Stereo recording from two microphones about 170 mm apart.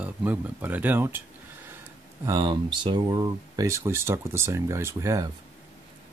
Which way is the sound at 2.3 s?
25° right (ahead or behind).